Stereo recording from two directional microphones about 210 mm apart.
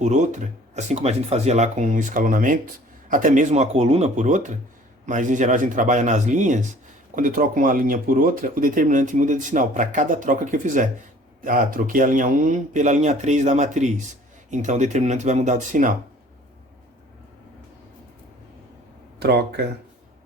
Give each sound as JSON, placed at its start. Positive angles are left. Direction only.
{"t": 0.0, "sound": "speech", "side_deg": -35}
{"t": 19.2, "sound": "speech", "side_deg": -50}